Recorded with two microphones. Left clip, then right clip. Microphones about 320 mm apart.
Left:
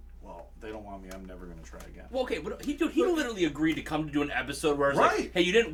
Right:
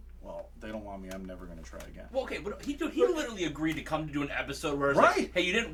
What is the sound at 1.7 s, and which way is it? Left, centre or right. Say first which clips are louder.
Speech: right 4 dB; right.